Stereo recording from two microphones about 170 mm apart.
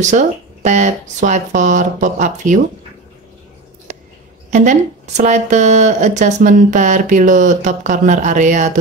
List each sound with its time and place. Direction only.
0.0 s speech: 45° right (ahead or behind)
3.9 s a sound: 45° right (ahead or behind)
4.5 s speech: 45° right (ahead or behind)